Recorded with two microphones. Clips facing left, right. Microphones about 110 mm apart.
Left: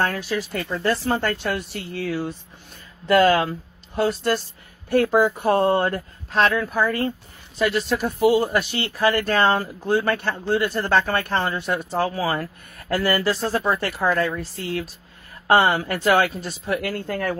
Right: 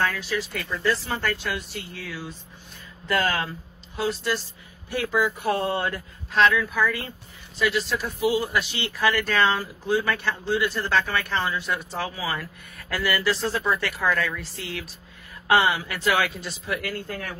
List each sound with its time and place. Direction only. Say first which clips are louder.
0.0 s speech: left 3 dB; 45° left (ahead or behind)